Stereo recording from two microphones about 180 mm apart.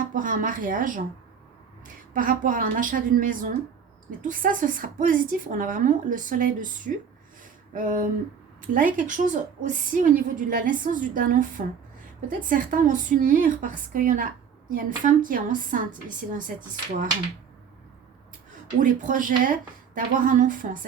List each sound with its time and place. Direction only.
0.0 s speech: 50° right (ahead or behind)
2.1 s a woman's voice: 50° right (ahead or behind)
18.8 s a woman's voice: 45° right (ahead or behind)